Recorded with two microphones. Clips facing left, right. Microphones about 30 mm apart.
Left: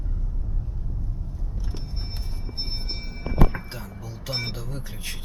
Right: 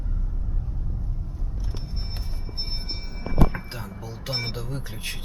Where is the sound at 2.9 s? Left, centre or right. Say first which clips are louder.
Left 1 dB; centre.